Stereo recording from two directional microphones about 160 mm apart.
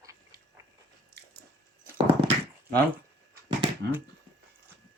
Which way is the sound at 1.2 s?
90° right.